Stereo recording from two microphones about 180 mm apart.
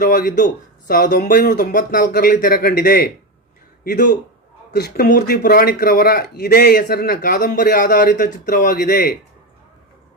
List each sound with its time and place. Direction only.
0.0 s speech: 50° left (ahead or behind)
4.7 s speech: 60° left (ahead or behind)